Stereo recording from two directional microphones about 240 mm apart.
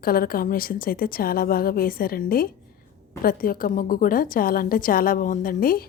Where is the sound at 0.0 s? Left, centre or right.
Left.